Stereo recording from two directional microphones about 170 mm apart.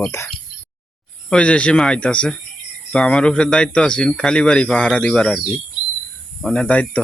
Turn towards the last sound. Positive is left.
turn(degrees=10)  # may be behind; listen again after turning